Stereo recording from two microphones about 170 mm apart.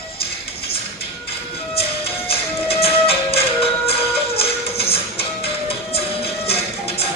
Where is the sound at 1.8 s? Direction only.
35° left (ahead or behind).